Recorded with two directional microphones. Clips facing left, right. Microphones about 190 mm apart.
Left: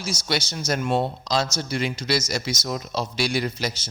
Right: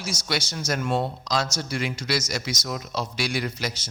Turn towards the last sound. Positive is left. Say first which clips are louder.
# left 3 dB
turn(degrees=30)  # may be behind; listen again after turning